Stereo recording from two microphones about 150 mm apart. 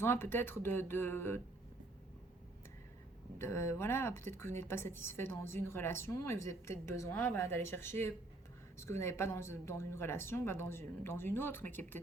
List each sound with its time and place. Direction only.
0.0 s a woman's voice: 15° left (ahead or behind)
3.3 s a woman's voice: 15° left (ahead or behind)